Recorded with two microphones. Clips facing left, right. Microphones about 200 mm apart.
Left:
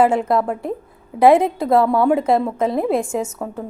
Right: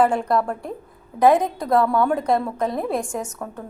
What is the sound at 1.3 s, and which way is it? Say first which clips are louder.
A woman's voice: left 4 dB; 25° left (ahead or behind).